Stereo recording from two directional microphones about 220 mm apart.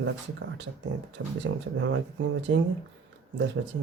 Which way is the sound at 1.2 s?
60° right (ahead or behind).